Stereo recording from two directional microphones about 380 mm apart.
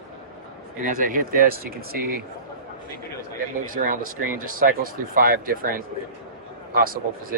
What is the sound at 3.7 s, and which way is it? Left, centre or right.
Speech, right.